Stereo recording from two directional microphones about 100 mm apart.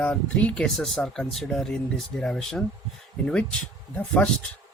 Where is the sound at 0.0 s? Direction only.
10° left (ahead or behind).